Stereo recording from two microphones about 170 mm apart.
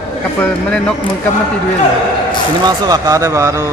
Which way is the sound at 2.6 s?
20° right (ahead or behind).